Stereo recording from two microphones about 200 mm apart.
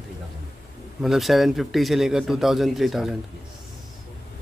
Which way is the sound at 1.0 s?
Centre (ahead or behind).